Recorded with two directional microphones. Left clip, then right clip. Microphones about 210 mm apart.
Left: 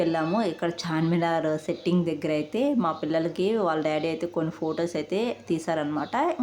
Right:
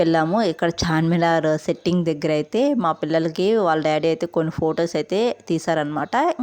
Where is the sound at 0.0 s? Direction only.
40° right (ahead or behind).